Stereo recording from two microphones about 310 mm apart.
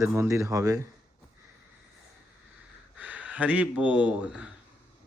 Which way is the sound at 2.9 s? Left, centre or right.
Centre.